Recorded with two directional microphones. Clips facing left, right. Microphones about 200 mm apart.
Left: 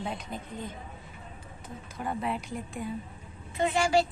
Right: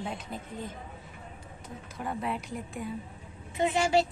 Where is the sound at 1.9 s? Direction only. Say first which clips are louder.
Left 1 dB; centre (ahead or behind).